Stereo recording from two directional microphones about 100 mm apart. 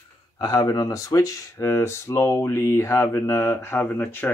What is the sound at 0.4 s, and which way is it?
Speech, 40° left (ahead or behind).